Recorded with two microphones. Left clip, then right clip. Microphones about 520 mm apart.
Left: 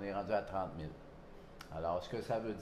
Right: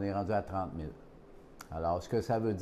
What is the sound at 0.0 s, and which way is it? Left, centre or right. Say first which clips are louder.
Speech: right 4 dB; right.